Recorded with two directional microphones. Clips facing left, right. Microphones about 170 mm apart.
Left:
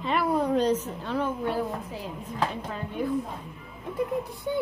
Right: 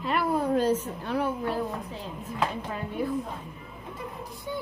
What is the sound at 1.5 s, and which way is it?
Speech, 10° left (ahead or behind).